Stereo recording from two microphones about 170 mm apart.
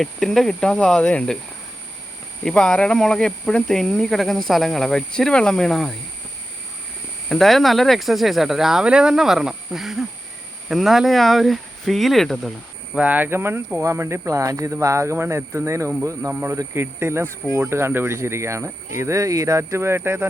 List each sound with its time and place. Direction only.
0.0 s speech: centre (ahead or behind)
2.4 s speech: 5° left (ahead or behind)
7.3 s speech: centre (ahead or behind); by 20.2 s 15° right (ahead or behind)